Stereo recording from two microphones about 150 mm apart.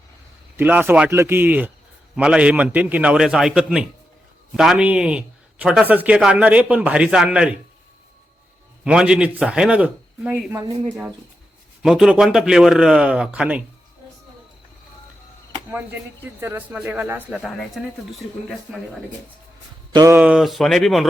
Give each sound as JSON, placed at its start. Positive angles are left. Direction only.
{"t": 0.5, "sound": "speech", "side_deg": -10}
{"t": 8.8, "sound": "speech", "side_deg": -5}
{"t": 11.8, "sound": "speech", "side_deg": -5}
{"t": 15.7, "sound": "speech", "side_deg": -15}
{"t": 18.7, "sound": "speech", "side_deg": -5}
{"t": 19.9, "sound": "speech", "side_deg": -25}
{"t": 20.1, "sound": "speech", "side_deg": -10}